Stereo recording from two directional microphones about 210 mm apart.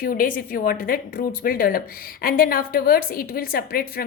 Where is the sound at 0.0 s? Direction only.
40° left (ahead or behind).